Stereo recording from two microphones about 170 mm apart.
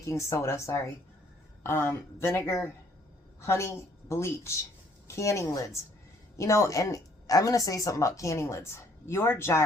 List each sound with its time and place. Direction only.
0.0 s speech: 15° left (ahead or behind)